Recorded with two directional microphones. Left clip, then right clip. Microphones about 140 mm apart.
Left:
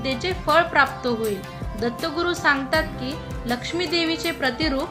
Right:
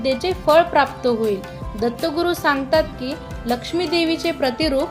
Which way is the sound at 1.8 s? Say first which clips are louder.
Right 4 dB; 25° right (ahead or behind).